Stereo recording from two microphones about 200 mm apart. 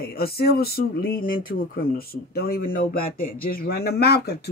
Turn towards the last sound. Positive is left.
turn(degrees=55)  # may be behind; listen again after turning